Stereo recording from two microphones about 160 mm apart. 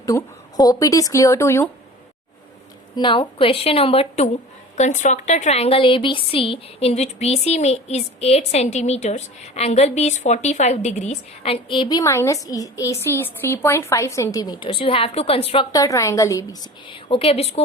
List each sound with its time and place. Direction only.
0.0 s speech: 20° left (ahead or behind)
2.9 s a woman's voice: 30° left (ahead or behind)
15.7 s a woman's voice: 20° left (ahead or behind)
16.9 s a woman's voice: 35° left (ahead or behind)